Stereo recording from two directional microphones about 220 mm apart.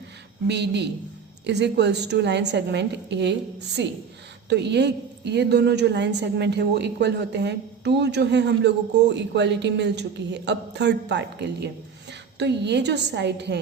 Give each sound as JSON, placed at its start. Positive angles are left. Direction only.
{"t": 0.4, "sound": "a woman's voice", "side_deg": -50}